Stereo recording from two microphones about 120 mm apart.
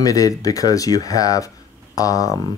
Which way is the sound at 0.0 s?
30° left (ahead or behind).